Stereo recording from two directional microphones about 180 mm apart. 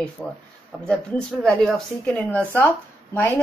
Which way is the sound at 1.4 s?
5° left (ahead or behind).